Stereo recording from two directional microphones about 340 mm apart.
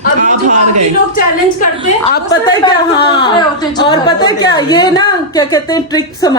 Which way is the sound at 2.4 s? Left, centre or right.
Centre.